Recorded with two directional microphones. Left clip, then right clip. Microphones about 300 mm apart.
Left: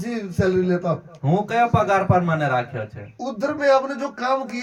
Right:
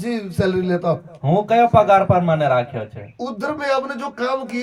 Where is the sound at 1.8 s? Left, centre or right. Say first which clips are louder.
Right 5 dB; centre.